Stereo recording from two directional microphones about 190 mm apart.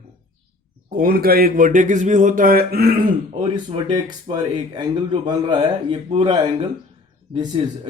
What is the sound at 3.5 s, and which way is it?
Speech, 25° right (ahead or behind).